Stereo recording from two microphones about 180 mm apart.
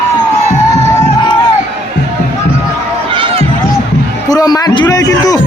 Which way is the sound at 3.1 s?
30° right (ahead or behind).